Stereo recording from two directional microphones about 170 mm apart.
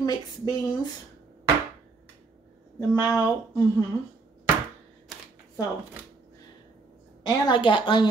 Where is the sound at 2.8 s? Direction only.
20° left (ahead or behind).